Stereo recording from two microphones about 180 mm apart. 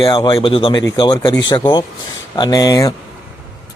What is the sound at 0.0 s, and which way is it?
Speech, 30° left (ahead or behind).